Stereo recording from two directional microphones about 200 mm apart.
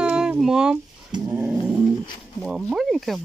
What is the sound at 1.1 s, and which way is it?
Dog, 20° right (ahead or behind).